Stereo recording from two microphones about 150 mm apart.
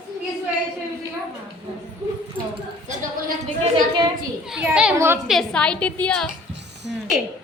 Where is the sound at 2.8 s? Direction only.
55° right (ahead or behind).